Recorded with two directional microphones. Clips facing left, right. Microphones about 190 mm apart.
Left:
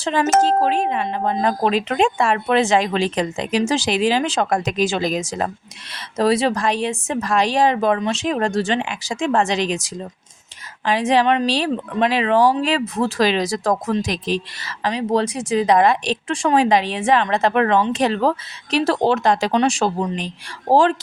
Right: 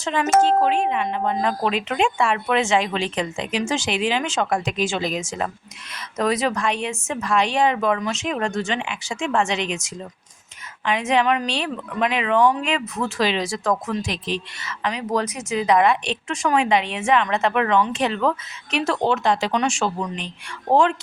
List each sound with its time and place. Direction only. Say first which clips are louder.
0.0 s speech: left 1 dB; 35° left (ahead or behind)